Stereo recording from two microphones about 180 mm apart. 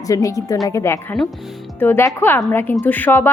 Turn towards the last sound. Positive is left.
turn(degrees=10)  # may be behind; listen again after turning